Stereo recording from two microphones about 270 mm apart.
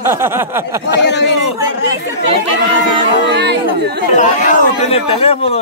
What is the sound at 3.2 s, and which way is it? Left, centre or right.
Speech, right.